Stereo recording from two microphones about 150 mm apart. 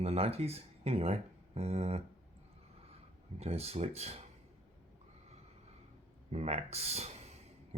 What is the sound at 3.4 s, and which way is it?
Speech, 45° right (ahead or behind).